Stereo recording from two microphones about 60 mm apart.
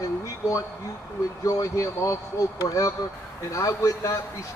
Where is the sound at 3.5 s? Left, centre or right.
Left.